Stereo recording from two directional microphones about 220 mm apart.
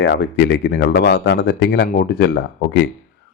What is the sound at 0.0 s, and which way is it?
Speech, 50° left (ahead or behind).